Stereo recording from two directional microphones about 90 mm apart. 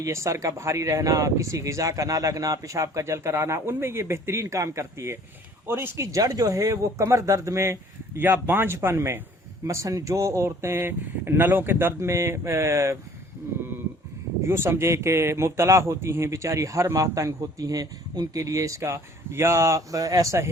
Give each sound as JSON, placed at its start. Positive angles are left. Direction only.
{"t": 0.0, "sound": "speech", "side_deg": -35}
{"t": 6.1, "sound": "speech", "side_deg": -40}
{"t": 14.4, "sound": "speech", "side_deg": -25}